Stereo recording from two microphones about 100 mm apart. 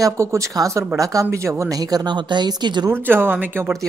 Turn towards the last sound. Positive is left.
turn(degrees=-20)  # may be behind; listen again after turning